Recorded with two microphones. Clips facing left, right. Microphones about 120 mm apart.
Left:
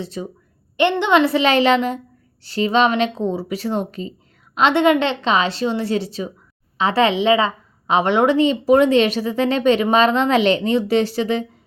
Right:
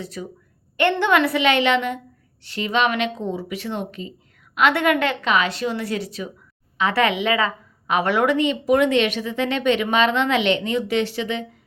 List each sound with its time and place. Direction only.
0.0 s a woman's voice: 25° left (ahead or behind)
4.5 s a woman's voice: 25° left (ahead or behind)